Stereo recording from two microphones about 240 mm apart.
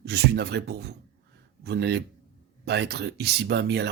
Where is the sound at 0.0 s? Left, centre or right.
Right.